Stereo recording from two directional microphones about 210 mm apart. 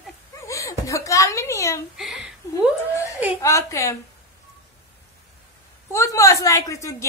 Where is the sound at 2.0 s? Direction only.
5° right (ahead or behind).